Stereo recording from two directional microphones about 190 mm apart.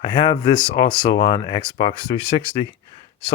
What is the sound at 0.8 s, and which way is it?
Speech, 20° left (ahead or behind).